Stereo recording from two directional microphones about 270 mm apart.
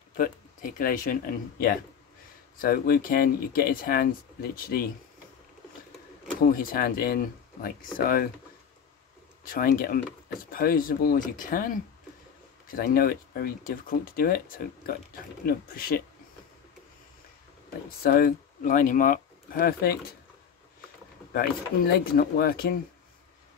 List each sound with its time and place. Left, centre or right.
0.2 s speech: left
6.4 s speech: left
9.5 s speech: left
15.4 s speech: left
18.0 s speech: left
21.3 s speech: left